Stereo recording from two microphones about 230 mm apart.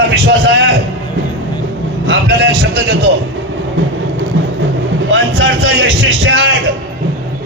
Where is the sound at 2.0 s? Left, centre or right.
Right.